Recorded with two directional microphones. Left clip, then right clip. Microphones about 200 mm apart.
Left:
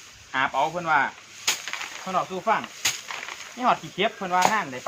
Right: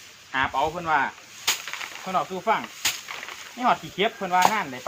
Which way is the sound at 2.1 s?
15° left (ahead or behind).